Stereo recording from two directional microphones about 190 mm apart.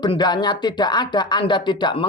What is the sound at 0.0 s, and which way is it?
Speech, 25° left (ahead or behind).